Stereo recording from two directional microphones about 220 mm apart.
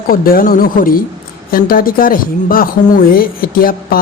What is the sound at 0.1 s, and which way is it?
Speech, 40° left (ahead or behind).